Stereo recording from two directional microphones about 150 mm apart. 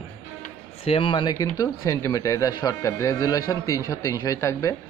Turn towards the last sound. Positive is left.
turn(degrees=20)  # may be behind; listen again after turning